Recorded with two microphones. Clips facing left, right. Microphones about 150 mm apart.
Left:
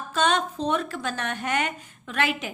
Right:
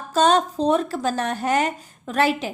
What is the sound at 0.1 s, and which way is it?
Speech, 35° right (ahead or behind).